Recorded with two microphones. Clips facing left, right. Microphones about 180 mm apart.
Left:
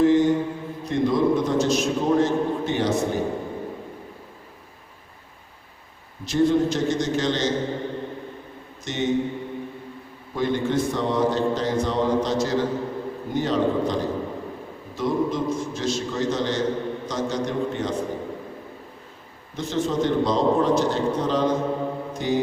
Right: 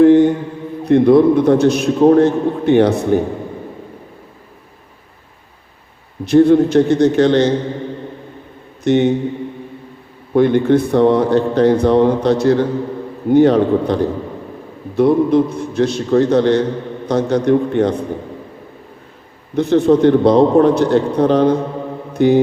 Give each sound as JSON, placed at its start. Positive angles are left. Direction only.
{"t": 0.0, "sound": "mantra", "side_deg": -60}
{"t": 0.9, "sound": "a man's voice", "side_deg": -60}
{"t": 6.2, "sound": "a man's voice", "side_deg": -60}
{"t": 8.8, "sound": "speech", "side_deg": -60}
{"t": 10.3, "sound": "a man's voice", "side_deg": -60}
{"t": 19.5, "sound": "a man's voice", "side_deg": -60}
{"t": 22.1, "sound": "mantra", "side_deg": -60}